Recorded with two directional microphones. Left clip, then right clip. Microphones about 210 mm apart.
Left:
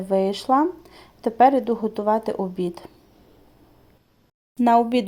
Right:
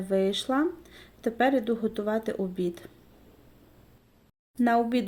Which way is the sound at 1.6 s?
90° left.